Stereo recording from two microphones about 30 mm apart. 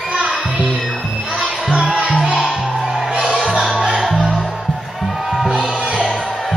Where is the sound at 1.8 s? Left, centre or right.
Right.